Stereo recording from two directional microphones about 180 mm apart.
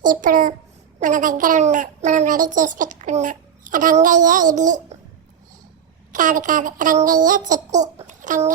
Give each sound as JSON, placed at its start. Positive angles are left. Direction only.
{"t": 0.0, "sound": "a child's voice", "side_deg": -45}
{"t": 6.1, "sound": "speech", "side_deg": -45}
{"t": 7.0, "sound": "a sound", "side_deg": -45}